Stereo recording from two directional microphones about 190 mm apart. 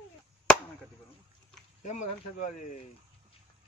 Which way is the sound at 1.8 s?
40° left (ahead or behind).